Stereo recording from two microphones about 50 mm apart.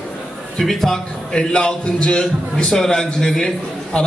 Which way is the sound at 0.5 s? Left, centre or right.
Centre.